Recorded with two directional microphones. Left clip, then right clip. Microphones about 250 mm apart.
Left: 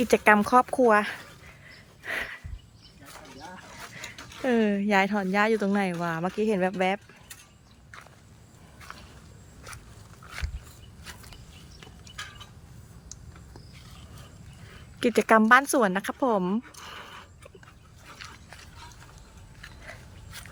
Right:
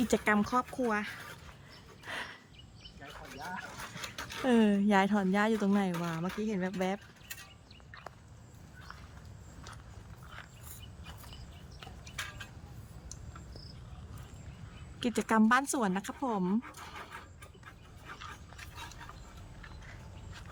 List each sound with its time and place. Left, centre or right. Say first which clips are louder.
0.1 s speech: left 12 dB; centre
0.7 s speech: left 13 dB; left
2.0 s a sound: left 8 dB; centre
4.2 s a sound: right 3 dB; centre
4.4 s speech: left 4 dB; centre
15.0 s speech: left 9 dB; centre